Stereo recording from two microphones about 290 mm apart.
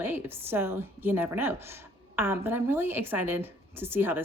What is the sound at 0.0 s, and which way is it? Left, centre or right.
A woman's voice, centre.